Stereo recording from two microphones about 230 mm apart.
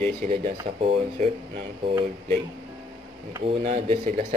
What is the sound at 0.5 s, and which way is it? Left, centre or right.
Speech, right.